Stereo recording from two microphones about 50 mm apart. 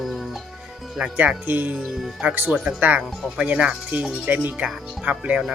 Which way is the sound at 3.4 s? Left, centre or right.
Right.